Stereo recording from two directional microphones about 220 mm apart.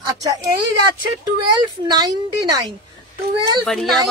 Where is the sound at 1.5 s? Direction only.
20° right (ahead or behind).